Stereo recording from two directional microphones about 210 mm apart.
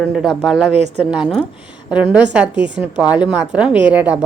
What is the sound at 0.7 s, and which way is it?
Speech, 30° right (ahead or behind).